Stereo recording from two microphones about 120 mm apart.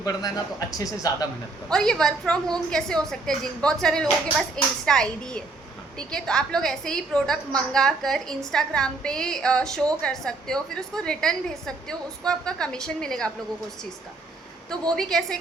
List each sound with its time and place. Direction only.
0.0 s speech: 35° left (ahead or behind)
1.7 s a woman's voice: 5° left (ahead or behind)
14.8 s a woman's voice: 5° left (ahead or behind)